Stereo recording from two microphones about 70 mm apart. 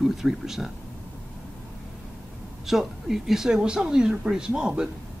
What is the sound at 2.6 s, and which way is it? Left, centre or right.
Speech, centre.